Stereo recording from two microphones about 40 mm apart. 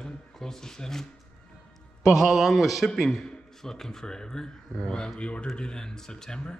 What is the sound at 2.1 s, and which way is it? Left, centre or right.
A man's voice, centre.